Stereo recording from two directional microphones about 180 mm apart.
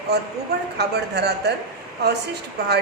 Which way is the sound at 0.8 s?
65° right (ahead or behind).